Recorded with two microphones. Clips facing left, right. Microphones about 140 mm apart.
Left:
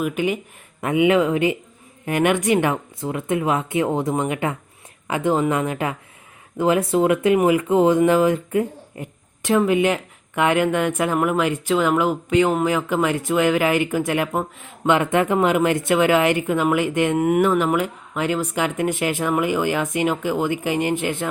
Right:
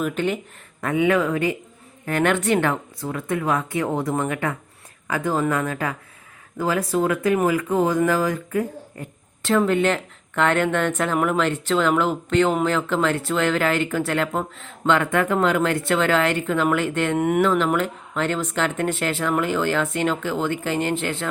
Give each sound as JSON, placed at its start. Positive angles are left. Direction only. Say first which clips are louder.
{"t": 0.0, "sound": "speech", "louder": "left 1 dB", "side_deg": 10}
{"t": 17.2, "sound": "speech", "louder": "even", "side_deg": 5}